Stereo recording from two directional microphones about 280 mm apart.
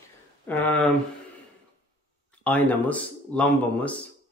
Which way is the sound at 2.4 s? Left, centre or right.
Centre.